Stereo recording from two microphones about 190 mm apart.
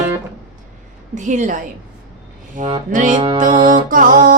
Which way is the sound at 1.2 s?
40° right (ahead or behind).